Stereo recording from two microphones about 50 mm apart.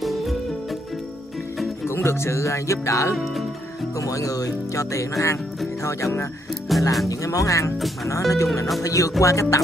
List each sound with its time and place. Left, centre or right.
0.0 s music: centre
1.9 s speech: left
6.7 s speech: centre
7.2 s speech: left